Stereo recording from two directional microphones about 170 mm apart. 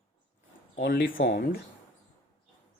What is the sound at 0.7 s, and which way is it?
Speech, 60° left (ahead or behind).